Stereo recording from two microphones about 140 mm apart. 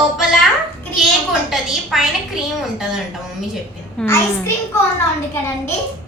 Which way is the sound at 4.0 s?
5° left (ahead or behind).